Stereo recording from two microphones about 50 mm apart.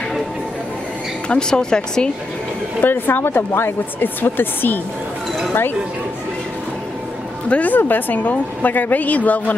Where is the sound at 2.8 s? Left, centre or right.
Left.